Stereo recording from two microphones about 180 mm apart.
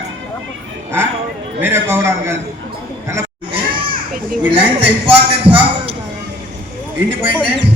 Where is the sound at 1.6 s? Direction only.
10° right (ahead or behind).